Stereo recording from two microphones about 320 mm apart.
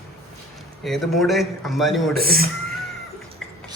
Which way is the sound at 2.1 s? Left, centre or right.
Right.